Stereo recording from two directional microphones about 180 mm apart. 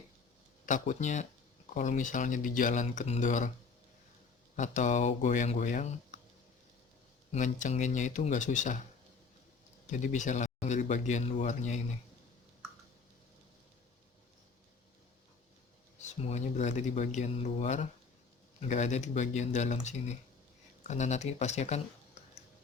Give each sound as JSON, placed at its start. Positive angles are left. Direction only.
{"t": 0.6, "sound": "speech", "side_deg": 45}
{"t": 4.5, "sound": "speech", "side_deg": 45}
{"t": 7.3, "sound": "speech", "side_deg": 45}
{"t": 9.8, "sound": "speech", "side_deg": 45}
{"t": 16.0, "sound": "speech", "side_deg": 40}